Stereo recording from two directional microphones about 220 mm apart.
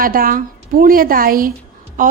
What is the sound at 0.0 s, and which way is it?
A woman's voice, 40° right (ahead or behind).